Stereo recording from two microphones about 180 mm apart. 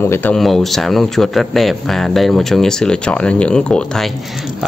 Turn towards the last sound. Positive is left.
turn(degrees=5)  # may be behind; listen again after turning